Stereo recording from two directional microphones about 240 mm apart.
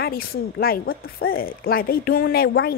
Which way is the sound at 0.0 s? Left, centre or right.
Left.